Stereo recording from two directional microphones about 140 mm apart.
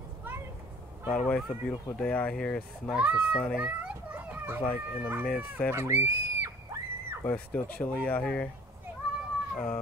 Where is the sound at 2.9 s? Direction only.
10° right (ahead or behind).